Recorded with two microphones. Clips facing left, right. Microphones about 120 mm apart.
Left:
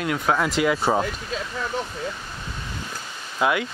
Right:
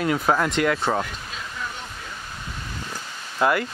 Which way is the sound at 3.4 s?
5° left (ahead or behind).